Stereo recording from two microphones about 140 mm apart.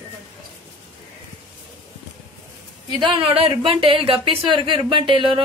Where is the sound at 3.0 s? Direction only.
35° right (ahead or behind).